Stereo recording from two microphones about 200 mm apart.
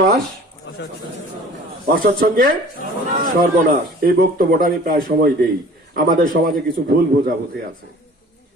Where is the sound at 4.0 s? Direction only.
45° right (ahead or behind).